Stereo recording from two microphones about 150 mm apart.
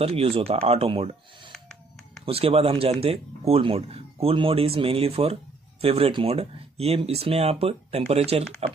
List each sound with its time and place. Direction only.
0.0 s speech: 40° right (ahead or behind)
1.5 s a sound: 5° left (ahead or behind)
2.2 s speech: 40° right (ahead or behind)